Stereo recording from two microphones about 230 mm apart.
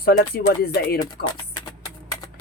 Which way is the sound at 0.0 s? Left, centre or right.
Left.